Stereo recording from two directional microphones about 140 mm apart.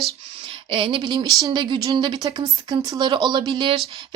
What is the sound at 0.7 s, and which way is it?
Speech, 40° right (ahead or behind).